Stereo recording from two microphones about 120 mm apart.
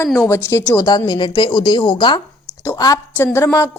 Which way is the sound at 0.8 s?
35° left (ahead or behind).